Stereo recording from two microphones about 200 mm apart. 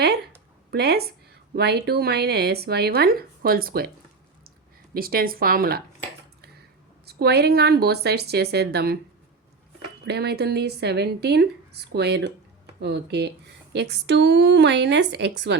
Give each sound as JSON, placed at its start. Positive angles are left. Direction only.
{"t": 0.7, "sound": "a woman's voice", "side_deg": -55}
{"t": 4.9, "sound": "a woman's voice", "side_deg": -45}
{"t": 7.0, "sound": "a woman's voice", "side_deg": -55}
{"t": 10.1, "sound": "speech", "side_deg": -55}